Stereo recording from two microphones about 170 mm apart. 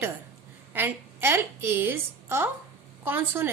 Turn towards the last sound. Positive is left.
turn(degrees=-10)  # may be behind; listen again after turning